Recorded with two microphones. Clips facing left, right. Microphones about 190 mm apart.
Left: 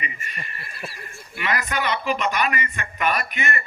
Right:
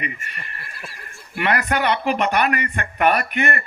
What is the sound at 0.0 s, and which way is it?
Speech, 60° right (ahead or behind).